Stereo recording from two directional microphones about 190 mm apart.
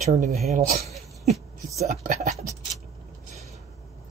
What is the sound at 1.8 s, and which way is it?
Speech, 35° right (ahead or behind).